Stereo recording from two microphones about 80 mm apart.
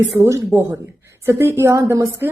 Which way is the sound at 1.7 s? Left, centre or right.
Right.